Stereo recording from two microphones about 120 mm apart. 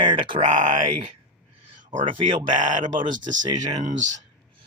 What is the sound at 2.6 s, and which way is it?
Speech, 90° right.